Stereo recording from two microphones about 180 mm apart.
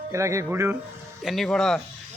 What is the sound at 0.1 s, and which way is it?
Speech, 15° right (ahead or behind).